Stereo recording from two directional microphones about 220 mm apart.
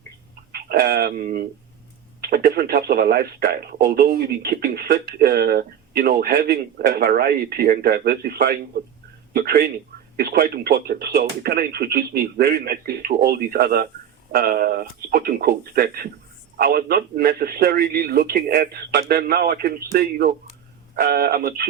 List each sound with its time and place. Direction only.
0.5 s speech: 45° right (ahead or behind)